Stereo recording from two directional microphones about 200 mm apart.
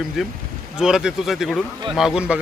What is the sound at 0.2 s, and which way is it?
Speech, centre (ahead or behind).